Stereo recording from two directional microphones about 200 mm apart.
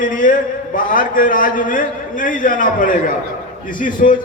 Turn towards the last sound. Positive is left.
turn(degrees=40)  # may be behind; listen again after turning